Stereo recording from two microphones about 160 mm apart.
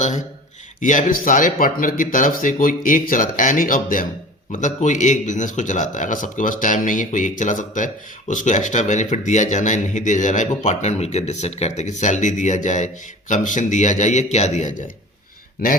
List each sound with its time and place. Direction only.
0.0 s speech: 50° left (ahead or behind)